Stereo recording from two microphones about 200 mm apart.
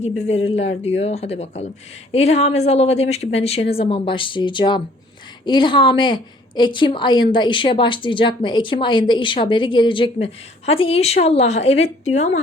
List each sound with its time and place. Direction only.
0.3 s a woman's voice: 30° left (ahead or behind)